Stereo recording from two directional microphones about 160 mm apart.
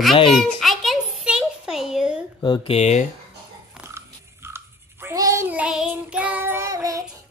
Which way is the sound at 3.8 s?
15° right (ahead or behind).